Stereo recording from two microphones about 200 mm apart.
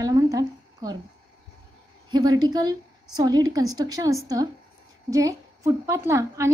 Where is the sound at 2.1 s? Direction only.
20° right (ahead or behind).